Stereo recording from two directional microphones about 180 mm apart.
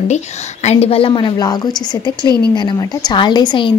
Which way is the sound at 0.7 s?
35° left (ahead or behind).